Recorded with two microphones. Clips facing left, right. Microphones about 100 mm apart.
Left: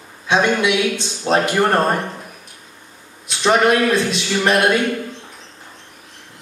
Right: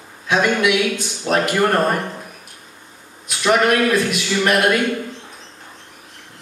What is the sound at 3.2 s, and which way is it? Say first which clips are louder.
A man's voice: left 1 dB; 25° left (ahead or behind).